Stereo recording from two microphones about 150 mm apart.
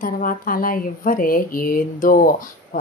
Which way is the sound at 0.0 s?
65° left (ahead or behind).